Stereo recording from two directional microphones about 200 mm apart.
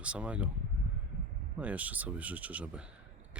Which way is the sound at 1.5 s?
5° right (ahead or behind).